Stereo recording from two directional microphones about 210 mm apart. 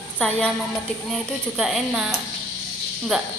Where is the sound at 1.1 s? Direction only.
Centre (ahead or behind).